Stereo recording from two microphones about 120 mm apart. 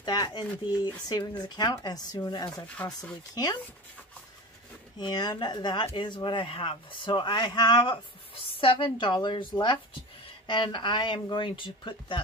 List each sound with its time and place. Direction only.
0.0 s speech: 35° left (ahead or behind)
4.9 s speech: 35° left (ahead or behind)